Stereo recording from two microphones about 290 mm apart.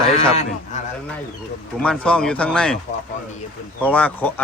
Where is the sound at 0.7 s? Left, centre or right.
Left.